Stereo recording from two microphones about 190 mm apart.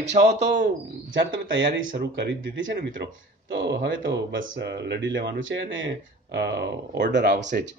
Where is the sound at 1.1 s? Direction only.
75° right (ahead or behind).